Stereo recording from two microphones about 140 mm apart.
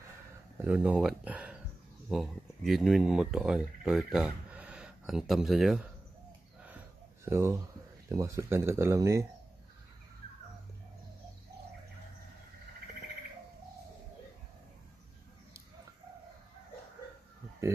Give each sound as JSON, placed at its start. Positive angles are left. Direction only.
{"t": 0.6, "sound": "speech", "side_deg": -10}
{"t": 7.2, "sound": "speech", "side_deg": -20}